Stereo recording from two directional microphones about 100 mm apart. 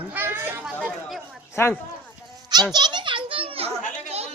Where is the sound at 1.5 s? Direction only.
25° left (ahead or behind).